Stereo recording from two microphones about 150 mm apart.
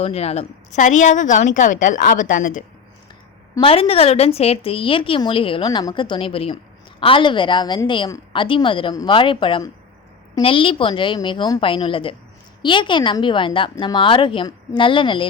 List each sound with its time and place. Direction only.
0.0 s a woman's voice: 45° left (ahead or behind); by 2.6 s 60° left (ahead or behind)
3.6 s a woman's voice: 40° left (ahead or behind)